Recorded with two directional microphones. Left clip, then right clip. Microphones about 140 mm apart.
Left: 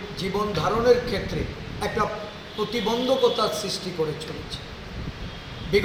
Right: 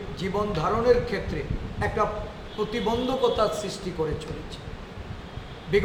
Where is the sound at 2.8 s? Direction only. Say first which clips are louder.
Left 3 dB; 5° right (ahead or behind).